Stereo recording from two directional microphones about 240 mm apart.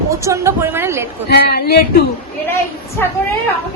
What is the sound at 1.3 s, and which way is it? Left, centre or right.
Speech, left.